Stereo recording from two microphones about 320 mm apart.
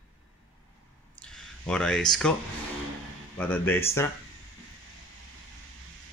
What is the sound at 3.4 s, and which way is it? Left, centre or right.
Speech, centre.